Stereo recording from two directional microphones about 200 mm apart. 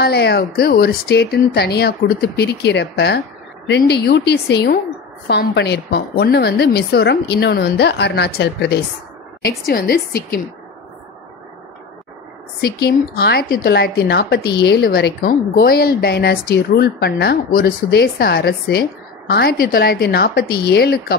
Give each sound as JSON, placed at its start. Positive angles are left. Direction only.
{"t": 0.0, "sound": "a woman's voice", "side_deg": 55}
{"t": 12.6, "sound": "a woman's voice", "side_deg": 50}